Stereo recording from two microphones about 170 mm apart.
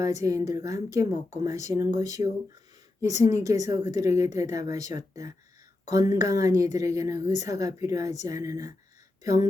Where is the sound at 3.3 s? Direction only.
20° right (ahead or behind).